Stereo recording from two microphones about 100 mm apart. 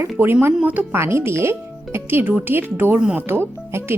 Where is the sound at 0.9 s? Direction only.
25° right (ahead or behind).